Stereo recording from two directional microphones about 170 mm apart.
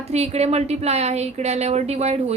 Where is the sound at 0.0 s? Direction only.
40° right (ahead or behind).